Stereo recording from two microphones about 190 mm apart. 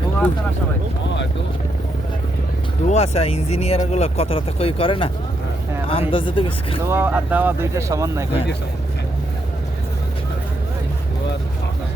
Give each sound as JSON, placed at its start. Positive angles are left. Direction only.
{"t": 2.8, "sound": "speech", "side_deg": 35}
{"t": 6.8, "sound": "speech", "side_deg": -10}